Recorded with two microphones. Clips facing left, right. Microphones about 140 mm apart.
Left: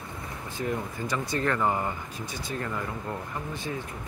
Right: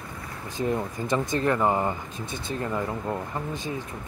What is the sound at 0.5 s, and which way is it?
Speech, 20° right (ahead or behind).